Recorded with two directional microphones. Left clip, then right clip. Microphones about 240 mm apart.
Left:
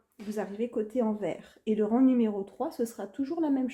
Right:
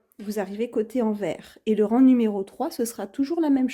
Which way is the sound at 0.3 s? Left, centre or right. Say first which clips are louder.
Right 5 dB; right.